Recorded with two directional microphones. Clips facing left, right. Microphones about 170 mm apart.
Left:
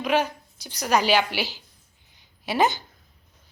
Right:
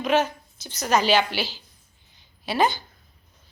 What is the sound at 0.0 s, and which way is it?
A woman's voice, 10° left (ahead or behind).